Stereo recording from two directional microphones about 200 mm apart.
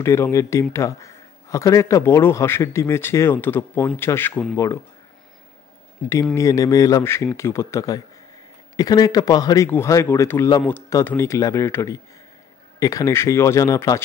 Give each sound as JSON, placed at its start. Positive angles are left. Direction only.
{"t": 0.0, "sound": "speech", "side_deg": 15}
{"t": 6.3, "sound": "speech", "side_deg": 15}